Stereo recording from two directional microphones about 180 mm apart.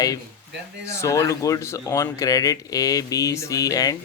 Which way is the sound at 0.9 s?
15° left (ahead or behind).